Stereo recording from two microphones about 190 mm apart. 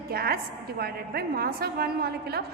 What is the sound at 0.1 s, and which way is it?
A woman's voice, 50° right (ahead or behind).